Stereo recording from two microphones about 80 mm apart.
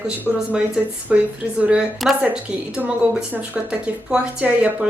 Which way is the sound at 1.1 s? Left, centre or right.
Centre.